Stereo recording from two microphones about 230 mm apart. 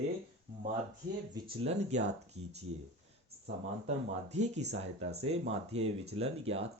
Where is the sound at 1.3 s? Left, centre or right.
Right.